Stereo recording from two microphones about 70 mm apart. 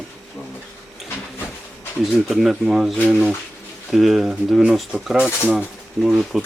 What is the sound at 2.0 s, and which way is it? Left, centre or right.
Speech, centre.